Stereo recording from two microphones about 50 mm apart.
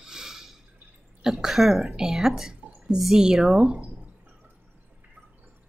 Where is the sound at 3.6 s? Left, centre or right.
Right.